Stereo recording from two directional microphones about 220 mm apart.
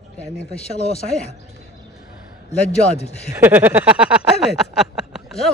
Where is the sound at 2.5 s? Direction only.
30° left (ahead or behind).